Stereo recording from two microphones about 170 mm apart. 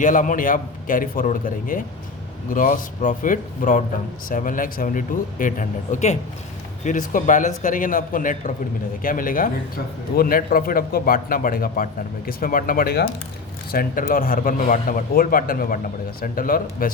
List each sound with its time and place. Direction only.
0.0 s a man's voice: 50° left (ahead or behind)